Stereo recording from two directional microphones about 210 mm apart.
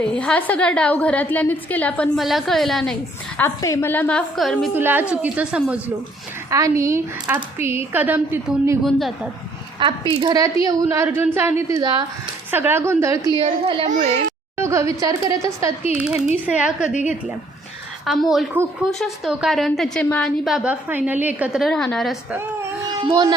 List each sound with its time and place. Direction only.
0.0 s a woman's voice: 5° left (ahead or behind)
3.3 s a woman's voice: 15° left (ahead or behind); by 8.8 s 10° right (ahead or behind)
8.8 s a woman's voice: centre (ahead or behind)
10.1 s speech: 25° right (ahead or behind)
12.5 s speech: 10° right (ahead or behind); by 14.3 s 30° right (ahead or behind)
14.6 s a woman's voice: 15° right (ahead or behind)
18.0 s a woman's voice: centre (ahead or behind)
23.0 s speech: 20° right (ahead or behind)